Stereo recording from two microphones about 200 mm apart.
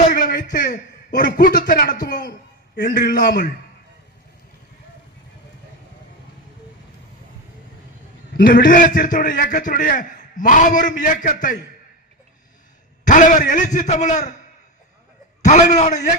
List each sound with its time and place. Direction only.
0.1 s a sound: 40° left (ahead or behind)
1.5 s a man's voice: 45° left (ahead or behind)
8.3 s a man's voice: 45° left (ahead or behind)
13.1 s a man's voice: 40° left (ahead or behind)
15.4 s a man's voice: 35° left (ahead or behind)